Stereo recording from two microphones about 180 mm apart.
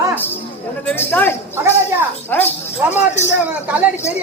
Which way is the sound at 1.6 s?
15° right (ahead or behind).